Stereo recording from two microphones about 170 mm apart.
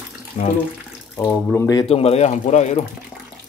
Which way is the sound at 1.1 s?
15° left (ahead or behind).